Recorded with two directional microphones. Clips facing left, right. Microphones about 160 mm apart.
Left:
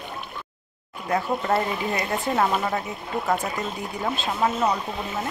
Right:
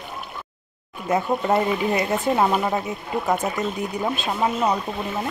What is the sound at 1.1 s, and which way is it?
Speech, 20° right (ahead or behind).